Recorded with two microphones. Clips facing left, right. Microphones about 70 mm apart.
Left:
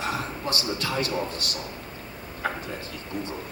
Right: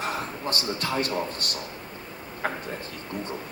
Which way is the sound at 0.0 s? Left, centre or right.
Right.